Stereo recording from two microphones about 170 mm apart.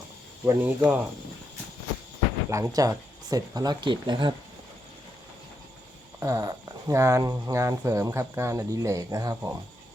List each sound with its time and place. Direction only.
0.4 s speech: 15° right (ahead or behind)
2.5 s speech: 20° right (ahead or behind)
6.1 s speech: 20° right (ahead or behind)